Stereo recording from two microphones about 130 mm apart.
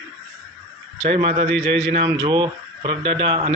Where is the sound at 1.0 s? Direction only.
45° right (ahead or behind).